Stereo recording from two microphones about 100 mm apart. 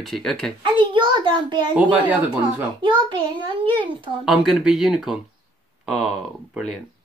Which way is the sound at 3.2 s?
50° right (ahead or behind).